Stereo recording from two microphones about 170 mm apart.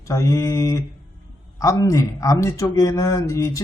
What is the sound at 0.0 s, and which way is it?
Speech, 20° left (ahead or behind).